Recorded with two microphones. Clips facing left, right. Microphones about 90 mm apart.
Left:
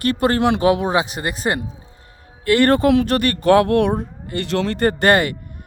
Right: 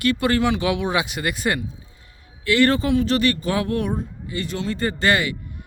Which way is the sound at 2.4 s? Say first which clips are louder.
Left 4 dB; 50° left (ahead or behind).